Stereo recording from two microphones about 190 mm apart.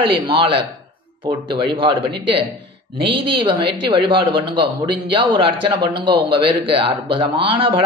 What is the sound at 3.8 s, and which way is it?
Speech, 25° right (ahead or behind).